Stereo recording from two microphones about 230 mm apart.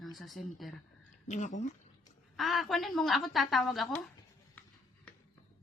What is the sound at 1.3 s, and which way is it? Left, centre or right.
Speech, left.